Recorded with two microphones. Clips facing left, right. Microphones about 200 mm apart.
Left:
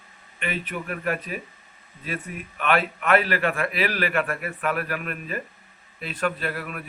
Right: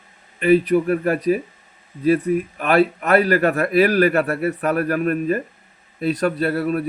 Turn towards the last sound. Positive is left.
turn(degrees=-35)  # may be behind; listen again after turning